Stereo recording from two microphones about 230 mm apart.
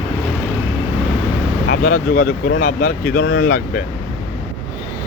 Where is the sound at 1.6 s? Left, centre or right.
Left.